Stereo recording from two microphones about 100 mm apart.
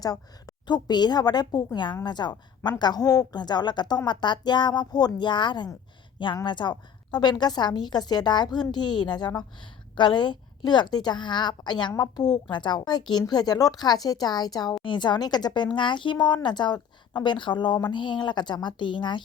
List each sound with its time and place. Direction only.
0.0 s a woman's voice: 40° left (ahead or behind)